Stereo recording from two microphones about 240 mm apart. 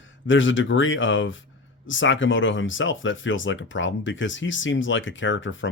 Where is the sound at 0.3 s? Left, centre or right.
Left.